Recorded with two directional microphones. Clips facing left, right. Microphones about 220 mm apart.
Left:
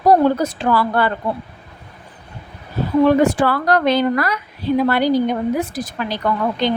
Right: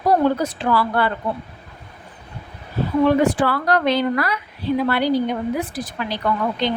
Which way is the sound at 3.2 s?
45° left (ahead or behind).